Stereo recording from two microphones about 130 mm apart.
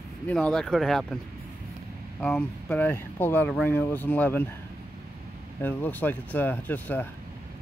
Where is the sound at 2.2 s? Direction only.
10° left (ahead or behind).